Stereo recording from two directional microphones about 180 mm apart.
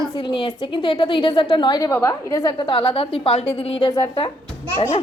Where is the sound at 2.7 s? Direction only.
30° left (ahead or behind).